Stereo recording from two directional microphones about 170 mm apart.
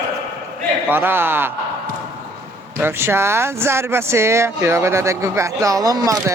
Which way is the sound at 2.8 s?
15° right (ahead or behind).